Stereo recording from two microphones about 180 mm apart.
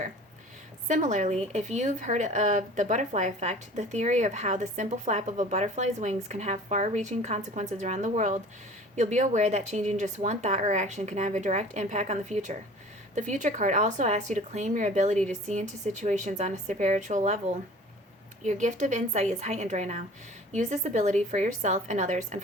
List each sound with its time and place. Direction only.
0.9 s speech: 45° right (ahead or behind)
18.4 s speech: 40° right (ahead or behind)